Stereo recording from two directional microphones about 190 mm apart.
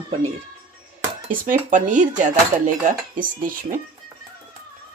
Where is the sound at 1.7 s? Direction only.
40° right (ahead or behind).